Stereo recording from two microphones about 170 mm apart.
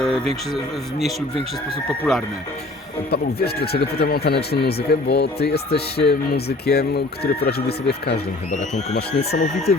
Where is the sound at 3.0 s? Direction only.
65° left (ahead or behind).